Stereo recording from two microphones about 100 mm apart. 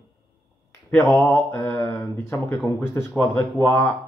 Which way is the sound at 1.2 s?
25° left (ahead or behind).